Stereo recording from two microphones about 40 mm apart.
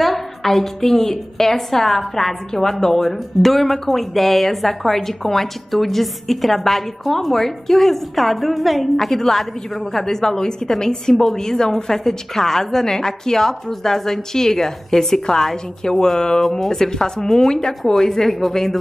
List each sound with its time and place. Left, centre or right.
0.0 s a woman's voice: centre
16.4 s a woman's voice: centre